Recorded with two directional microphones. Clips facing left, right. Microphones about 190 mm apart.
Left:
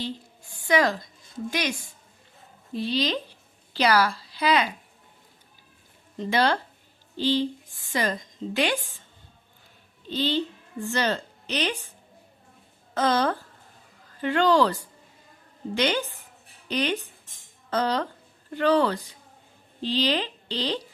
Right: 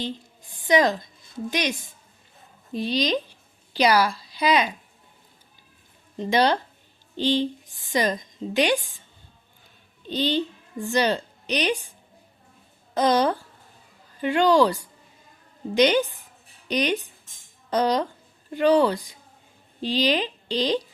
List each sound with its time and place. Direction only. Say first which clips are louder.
0.7 s a woman's voice: right 3 dB; 20° right (ahead or behind)
2.7 s a woman's voice: right 2 dB; 15° right (ahead or behind)
6.1 s a woman's voice: right 3 dB; 15° right (ahead or behind)
10.1 s a child's voice: right 2 dB; 15° right (ahead or behind)